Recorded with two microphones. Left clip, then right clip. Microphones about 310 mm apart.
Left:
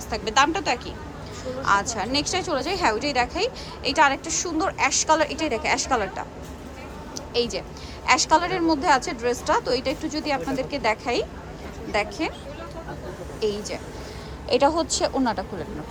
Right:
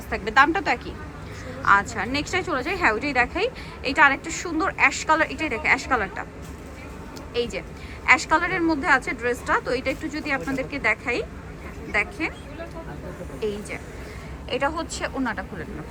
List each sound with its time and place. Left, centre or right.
0.1 s a woman's voice: centre
7.3 s a woman's voice: centre
13.4 s a woman's voice: centre